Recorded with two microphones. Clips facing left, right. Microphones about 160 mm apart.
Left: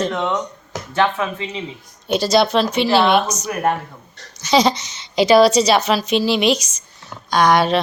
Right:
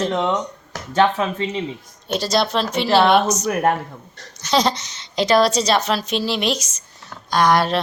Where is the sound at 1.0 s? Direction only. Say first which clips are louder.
Right 2 dB; 35° right (ahead or behind).